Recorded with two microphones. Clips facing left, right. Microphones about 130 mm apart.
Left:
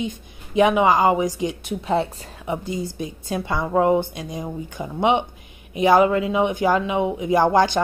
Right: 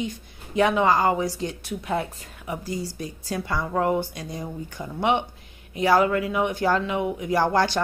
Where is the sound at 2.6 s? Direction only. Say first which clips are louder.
Left 3 dB; 20° left (ahead or behind).